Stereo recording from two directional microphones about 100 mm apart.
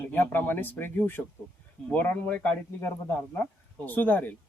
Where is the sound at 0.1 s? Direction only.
20° left (ahead or behind).